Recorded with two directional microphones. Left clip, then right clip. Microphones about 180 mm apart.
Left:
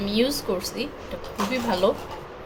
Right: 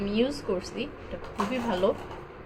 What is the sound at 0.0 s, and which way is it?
Speech, centre (ahead or behind).